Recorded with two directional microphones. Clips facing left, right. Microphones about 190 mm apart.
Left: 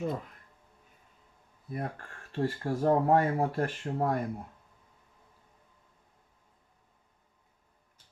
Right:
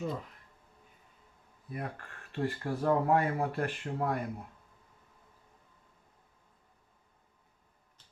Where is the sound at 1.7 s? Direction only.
40° left (ahead or behind).